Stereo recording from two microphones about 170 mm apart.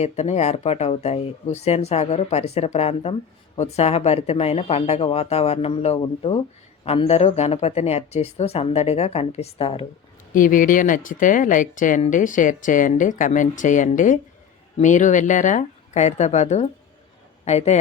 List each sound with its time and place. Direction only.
0.0 s speech: 40° left (ahead or behind)
10.3 s a man's voice: 50° left (ahead or behind)